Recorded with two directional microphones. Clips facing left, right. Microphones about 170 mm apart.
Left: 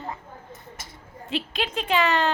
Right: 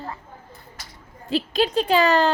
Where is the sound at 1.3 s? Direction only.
35° right (ahead or behind).